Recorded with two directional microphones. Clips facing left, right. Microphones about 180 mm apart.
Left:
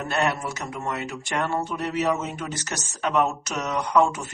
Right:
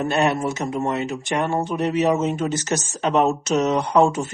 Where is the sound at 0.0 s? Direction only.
20° right (ahead or behind).